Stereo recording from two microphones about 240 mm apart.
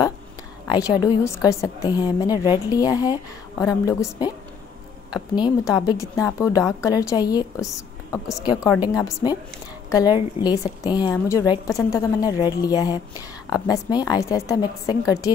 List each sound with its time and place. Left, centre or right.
0.7 s a woman's voice: centre